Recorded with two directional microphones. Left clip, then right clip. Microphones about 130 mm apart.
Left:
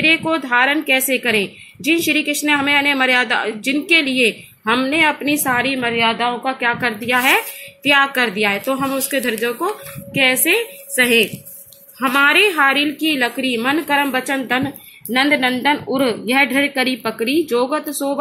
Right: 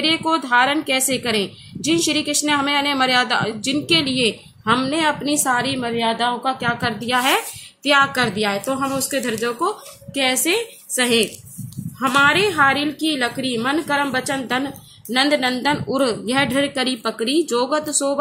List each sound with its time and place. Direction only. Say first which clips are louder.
0.1 s a woman's voice: left 1 dB; centre (ahead or behind)